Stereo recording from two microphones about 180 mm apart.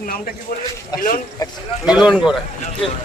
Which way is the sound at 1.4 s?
20° left (ahead or behind).